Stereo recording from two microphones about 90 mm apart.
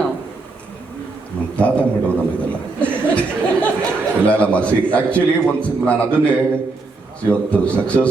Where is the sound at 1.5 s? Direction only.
15° left (ahead or behind).